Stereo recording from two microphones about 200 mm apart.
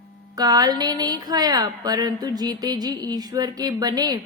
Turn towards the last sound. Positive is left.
turn(degrees=-20)  # may be behind; listen again after turning